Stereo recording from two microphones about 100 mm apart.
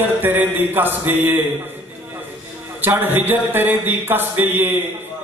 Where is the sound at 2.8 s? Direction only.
20° right (ahead or behind).